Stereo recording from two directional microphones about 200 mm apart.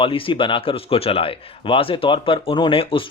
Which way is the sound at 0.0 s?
25° left (ahead or behind).